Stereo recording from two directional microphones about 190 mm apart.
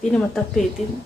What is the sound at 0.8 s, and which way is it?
Speech, 40° left (ahead or behind).